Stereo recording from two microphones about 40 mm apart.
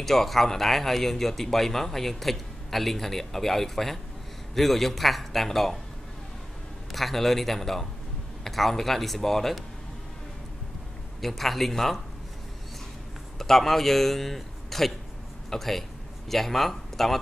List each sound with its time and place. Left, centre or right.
0.0 s a man's voice: centre
6.9 s a man's voice: centre
11.1 s a man's voice: centre
13.4 s a man's voice: centre